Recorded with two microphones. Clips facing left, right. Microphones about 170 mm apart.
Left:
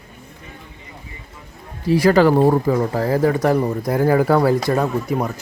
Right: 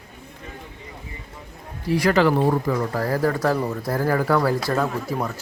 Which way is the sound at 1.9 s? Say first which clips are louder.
Left 5 dB; 30° left (ahead or behind).